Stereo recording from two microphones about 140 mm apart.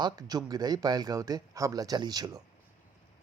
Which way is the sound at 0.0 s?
30° right (ahead or behind).